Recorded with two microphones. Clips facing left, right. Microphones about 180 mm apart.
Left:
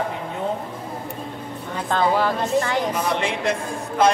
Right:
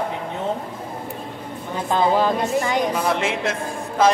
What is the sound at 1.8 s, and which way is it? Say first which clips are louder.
A woman's voice: right 2 dB; 20° right (ahead or behind).